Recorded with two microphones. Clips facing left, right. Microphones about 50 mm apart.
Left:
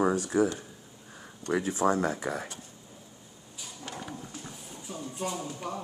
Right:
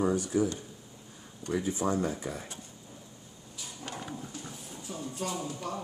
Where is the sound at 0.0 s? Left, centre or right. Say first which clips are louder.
Left 2 dB; left.